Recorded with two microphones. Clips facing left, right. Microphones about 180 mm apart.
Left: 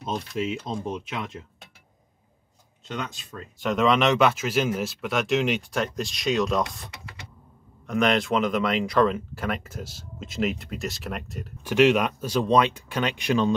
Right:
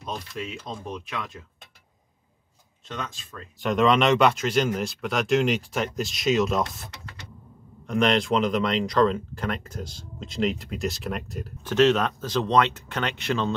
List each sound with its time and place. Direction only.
0.1 s speech: 20° left (ahead or behind)
2.9 s speech: 20° left (ahead or behind)
3.5 s speech: centre (ahead or behind)
6.9 s a sound: 10° left (ahead or behind)
7.8 s speech: centre (ahead or behind)
11.6 s speech: 10° left (ahead or behind)